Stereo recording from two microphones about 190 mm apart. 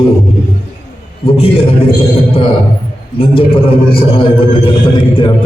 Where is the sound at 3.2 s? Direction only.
30° left (ahead or behind).